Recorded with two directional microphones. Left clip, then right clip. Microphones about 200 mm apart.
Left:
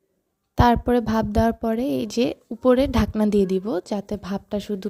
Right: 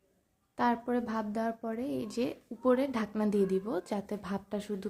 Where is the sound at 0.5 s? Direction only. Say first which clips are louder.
Left 12 dB; 50° left (ahead or behind).